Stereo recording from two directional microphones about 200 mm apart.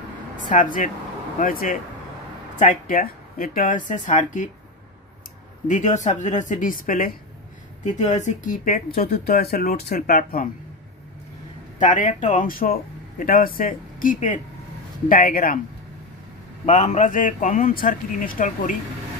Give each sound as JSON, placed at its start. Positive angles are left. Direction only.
{"t": 0.5, "sound": "speech", "side_deg": 40}
{"t": 5.7, "sound": "speech", "side_deg": 35}
{"t": 11.8, "sound": "speech", "side_deg": 40}
{"t": 16.6, "sound": "speech", "side_deg": 35}